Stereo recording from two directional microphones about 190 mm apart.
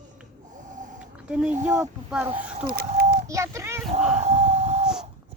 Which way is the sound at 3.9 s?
35° right (ahead or behind).